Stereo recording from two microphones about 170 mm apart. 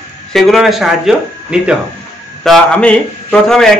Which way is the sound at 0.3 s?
Centre (ahead or behind).